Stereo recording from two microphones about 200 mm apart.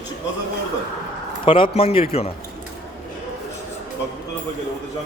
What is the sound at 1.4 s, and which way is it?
Speech, 25° left (ahead or behind).